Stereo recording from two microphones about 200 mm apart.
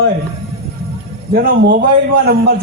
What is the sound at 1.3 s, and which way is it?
Speech, 50° right (ahead or behind).